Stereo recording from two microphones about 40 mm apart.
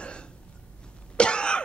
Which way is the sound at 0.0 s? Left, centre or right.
Left.